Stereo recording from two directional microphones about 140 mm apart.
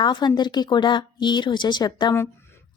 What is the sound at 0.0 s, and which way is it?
A woman's voice, 30° left (ahead or behind).